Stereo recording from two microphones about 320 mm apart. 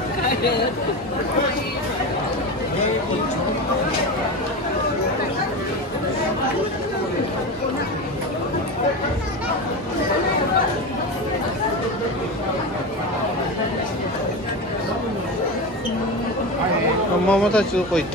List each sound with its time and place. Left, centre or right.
0.3 s chatter: left
17.3 s speech: centre